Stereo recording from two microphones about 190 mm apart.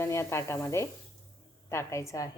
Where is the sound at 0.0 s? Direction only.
15° left (ahead or behind).